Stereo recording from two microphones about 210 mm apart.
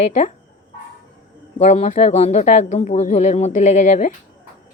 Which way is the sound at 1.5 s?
35° left (ahead or behind).